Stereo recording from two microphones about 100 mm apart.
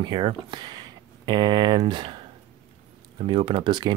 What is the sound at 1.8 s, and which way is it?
Speech, 55° right (ahead or behind).